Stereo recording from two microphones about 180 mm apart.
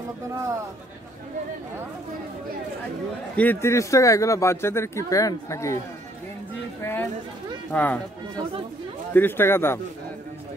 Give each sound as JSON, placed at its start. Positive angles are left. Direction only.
{"t": 3.3, "sound": "speech", "side_deg": 10}
{"t": 6.8, "sound": "chatter", "side_deg": 10}
{"t": 7.7, "sound": "speech", "side_deg": 10}
{"t": 9.1, "sound": "speech", "side_deg": 10}